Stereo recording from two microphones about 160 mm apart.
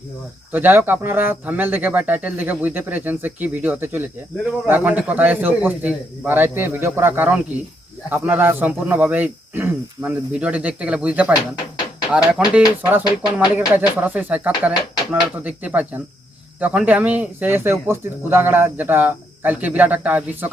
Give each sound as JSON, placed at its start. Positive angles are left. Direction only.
{"t": 0.5, "sound": "speech", "side_deg": -15}